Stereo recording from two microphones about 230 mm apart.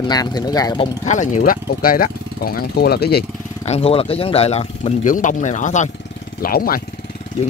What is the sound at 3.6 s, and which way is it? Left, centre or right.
Speech, left.